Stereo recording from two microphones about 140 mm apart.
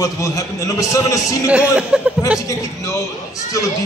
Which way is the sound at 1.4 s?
10° right (ahead or behind).